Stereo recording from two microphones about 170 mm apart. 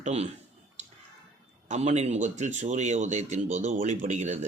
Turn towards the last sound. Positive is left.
turn(degrees=-45)  # may be behind; listen again after turning